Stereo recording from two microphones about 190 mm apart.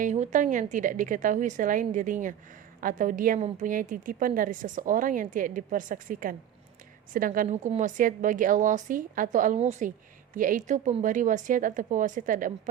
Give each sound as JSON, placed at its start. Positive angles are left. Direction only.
{"t": 0.0, "sound": "a woman's voice", "side_deg": -40}